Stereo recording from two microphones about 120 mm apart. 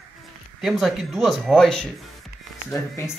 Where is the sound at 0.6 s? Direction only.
Centre (ahead or behind).